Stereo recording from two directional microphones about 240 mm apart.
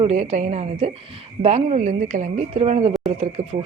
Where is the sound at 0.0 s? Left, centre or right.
Right.